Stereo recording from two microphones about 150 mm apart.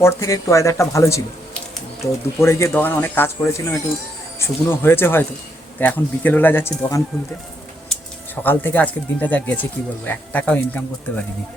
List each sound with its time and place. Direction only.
0.0 s speech: 20° left (ahead or behind)
8.4 s speech: 10° left (ahead or behind)